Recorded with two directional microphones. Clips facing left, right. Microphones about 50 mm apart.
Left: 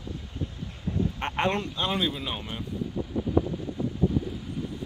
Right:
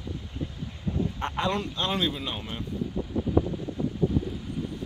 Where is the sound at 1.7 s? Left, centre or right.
Centre.